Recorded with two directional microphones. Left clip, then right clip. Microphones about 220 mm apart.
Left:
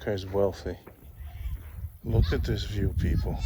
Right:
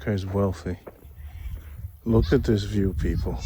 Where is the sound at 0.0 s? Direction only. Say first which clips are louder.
Even; 20° right (ahead or behind).